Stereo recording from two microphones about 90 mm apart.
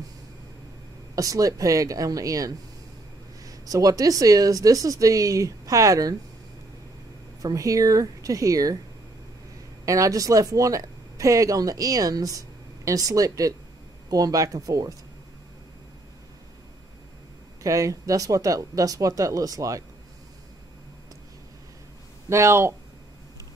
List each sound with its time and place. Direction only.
1.1 s speech: 40° right (ahead or behind)
7.4 s speech: 40° right (ahead or behind)
9.8 s speech: 40° right (ahead or behind)
17.6 s speech: 40° right (ahead or behind)
22.3 s speech: 30° right (ahead or behind)